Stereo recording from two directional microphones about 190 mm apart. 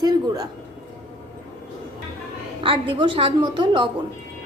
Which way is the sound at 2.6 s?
25° right (ahead or behind).